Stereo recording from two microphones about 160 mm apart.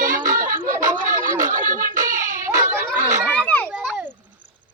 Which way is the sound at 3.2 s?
5° left (ahead or behind).